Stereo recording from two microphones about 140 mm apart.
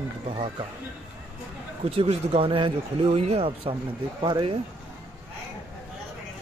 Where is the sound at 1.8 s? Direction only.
45° right (ahead or behind).